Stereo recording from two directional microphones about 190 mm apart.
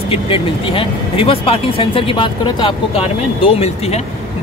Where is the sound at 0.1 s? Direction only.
30° left (ahead or behind).